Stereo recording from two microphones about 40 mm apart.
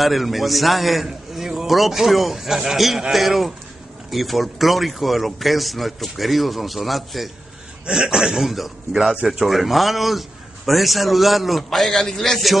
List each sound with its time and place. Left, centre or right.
0.0 s a man's voice: centre
1.0 s a sound: centre
1.7 s a man's voice: centre
7.8 s a man's voice: centre
9.1 s a man's voice: centre
9.4 s a man's voice: centre